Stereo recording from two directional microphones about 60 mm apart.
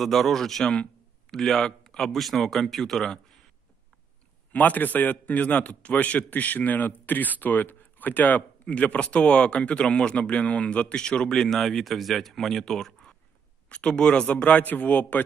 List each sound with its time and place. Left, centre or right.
0.0 s speech: centre
4.5 s a man's voice: left; by 13.1 s centre
13.7 s a man's voice: centre